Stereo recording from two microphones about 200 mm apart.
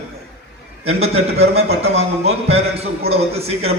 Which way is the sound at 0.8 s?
30° right (ahead or behind).